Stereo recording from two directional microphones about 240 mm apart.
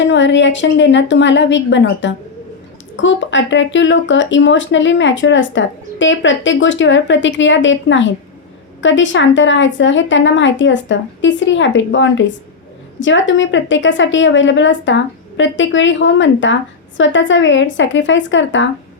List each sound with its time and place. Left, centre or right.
0.1 s speech: left